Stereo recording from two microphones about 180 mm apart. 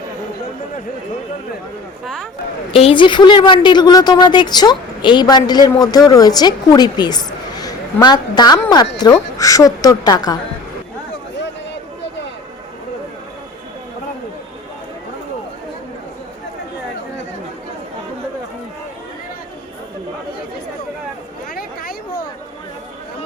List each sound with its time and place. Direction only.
2.7 s a woman's voice: 30° left (ahead or behind)